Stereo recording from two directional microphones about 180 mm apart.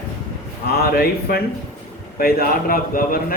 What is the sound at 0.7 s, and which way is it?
Speech, 60° left (ahead or behind).